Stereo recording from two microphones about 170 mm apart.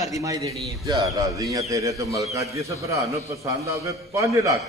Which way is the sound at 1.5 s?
20° right (ahead or behind).